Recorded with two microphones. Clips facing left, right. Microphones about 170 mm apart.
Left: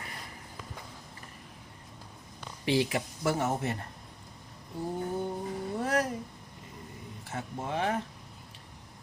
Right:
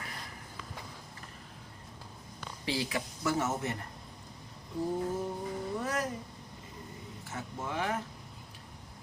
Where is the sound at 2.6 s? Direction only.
65° left (ahead or behind).